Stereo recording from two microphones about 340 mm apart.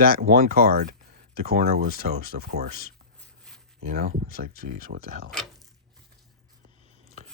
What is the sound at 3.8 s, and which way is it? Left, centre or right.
Speech, right.